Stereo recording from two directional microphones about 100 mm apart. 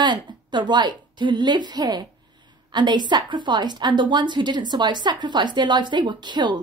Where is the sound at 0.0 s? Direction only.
50° right (ahead or behind).